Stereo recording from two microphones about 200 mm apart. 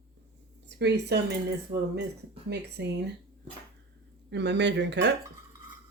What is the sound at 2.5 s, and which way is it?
Speech, 55° right (ahead or behind).